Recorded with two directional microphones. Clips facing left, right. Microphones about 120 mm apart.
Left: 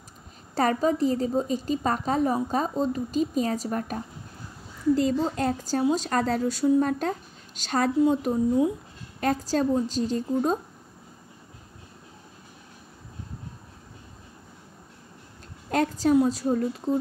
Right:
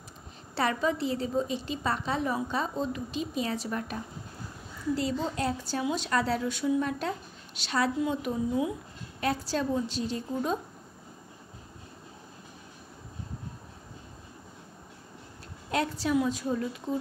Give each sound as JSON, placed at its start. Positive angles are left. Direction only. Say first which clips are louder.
{"t": 0.6, "sound": "a woman's voice", "louder": "left 5 dB", "side_deg": 40}
{"t": 15.7, "sound": "a woman's voice", "louder": "left 6 dB", "side_deg": 45}